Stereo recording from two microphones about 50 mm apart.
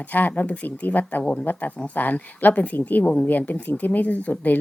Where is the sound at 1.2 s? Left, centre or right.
Left.